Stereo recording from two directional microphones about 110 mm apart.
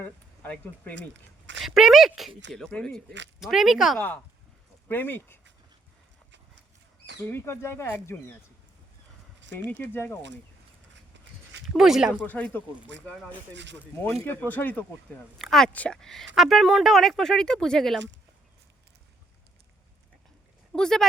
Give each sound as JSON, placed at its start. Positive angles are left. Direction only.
{"t": 0.0, "sound": "speech", "side_deg": 15}
{"t": 1.5, "sound": "speech", "side_deg": -5}
{"t": 3.4, "sound": "speech", "side_deg": -5}
{"t": 4.9, "sound": "speech", "side_deg": 15}
{"t": 7.3, "sound": "speech", "side_deg": 25}
{"t": 9.6, "sound": "speech", "side_deg": 15}
{"t": 11.8, "sound": "speech", "side_deg": -5}
{"t": 12.2, "sound": "speech", "side_deg": 15}
{"t": 14.3, "sound": "speech", "side_deg": 15}
{"t": 15.4, "sound": "speech", "side_deg": 5}
{"t": 20.7, "sound": "speech", "side_deg": 5}